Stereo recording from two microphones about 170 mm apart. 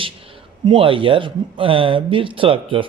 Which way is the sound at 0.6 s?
30° right (ahead or behind).